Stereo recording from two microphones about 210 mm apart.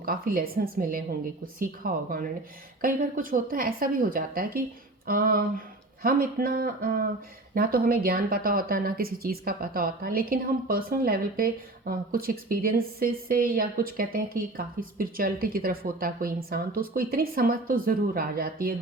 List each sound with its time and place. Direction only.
0.0 s speech: 45° right (ahead or behind)